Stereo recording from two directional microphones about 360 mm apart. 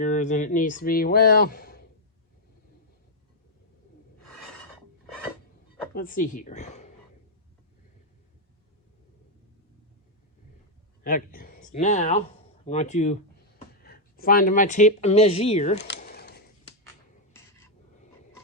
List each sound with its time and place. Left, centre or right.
0.0 s speech: left
5.9 s speech: left
11.0 s speech: left